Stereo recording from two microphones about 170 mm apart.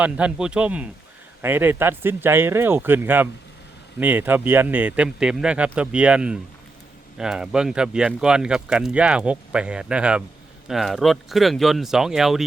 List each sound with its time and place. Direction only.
0.0 s speech: 5° right (ahead or behind)